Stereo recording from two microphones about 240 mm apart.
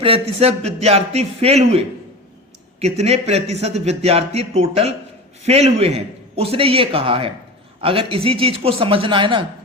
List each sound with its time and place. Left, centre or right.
0.0 s speech: right
2.8 s speech: right